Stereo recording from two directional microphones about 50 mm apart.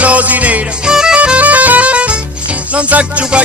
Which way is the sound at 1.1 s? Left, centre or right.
Right.